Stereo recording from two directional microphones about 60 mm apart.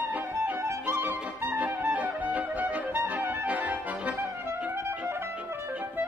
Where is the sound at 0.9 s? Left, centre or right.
Right.